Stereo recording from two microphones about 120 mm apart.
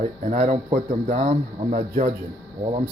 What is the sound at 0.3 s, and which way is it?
A man's voice, 85° right.